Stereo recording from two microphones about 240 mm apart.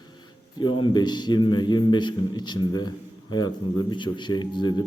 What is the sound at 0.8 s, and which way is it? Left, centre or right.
A man's voice, centre.